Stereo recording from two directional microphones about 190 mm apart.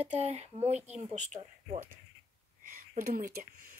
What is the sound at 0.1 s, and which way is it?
Speech, 35° right (ahead or behind).